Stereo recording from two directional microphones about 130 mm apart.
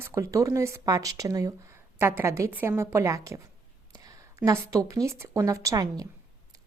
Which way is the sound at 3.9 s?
30° right (ahead or behind).